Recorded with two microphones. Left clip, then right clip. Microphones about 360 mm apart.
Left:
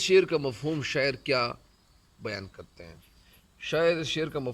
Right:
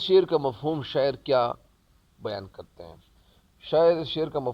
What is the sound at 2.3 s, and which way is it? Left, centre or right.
Speech, centre.